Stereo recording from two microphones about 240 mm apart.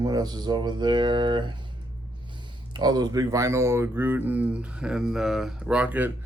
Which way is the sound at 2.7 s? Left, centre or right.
Centre.